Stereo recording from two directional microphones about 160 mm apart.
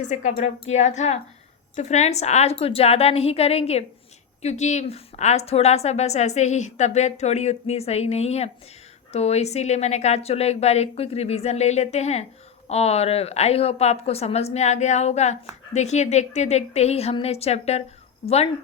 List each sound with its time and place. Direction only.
0.1 s a woman's voice: 50° left (ahead or behind)